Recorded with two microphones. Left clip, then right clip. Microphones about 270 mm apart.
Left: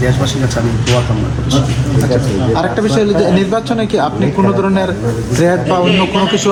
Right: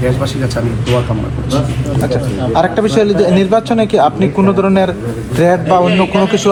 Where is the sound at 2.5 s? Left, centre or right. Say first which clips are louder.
Right 3 dB; right.